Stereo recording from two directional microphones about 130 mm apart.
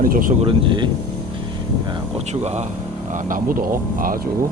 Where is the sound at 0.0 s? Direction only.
90° right.